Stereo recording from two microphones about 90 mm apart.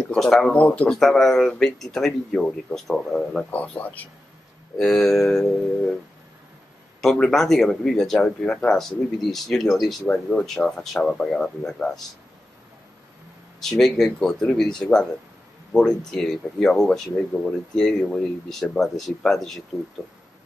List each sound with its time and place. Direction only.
0.1 s speech: 5° left (ahead or behind)
3.5 s speech: 15° left (ahead or behind)
4.7 s speech: 5° left (ahead or behind)
7.0 s speech: 5° left (ahead or behind)
10.0 s speech: 10° left (ahead or behind)
13.6 s speech: 5° left (ahead or behind)